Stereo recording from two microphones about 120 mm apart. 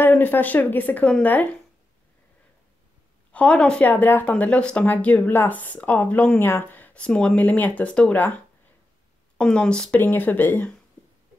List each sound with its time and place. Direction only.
0.0 s speech: 15° left (ahead or behind)
3.3 s speech: 10° left (ahead or behind)
9.4 s speech: 5° left (ahead or behind)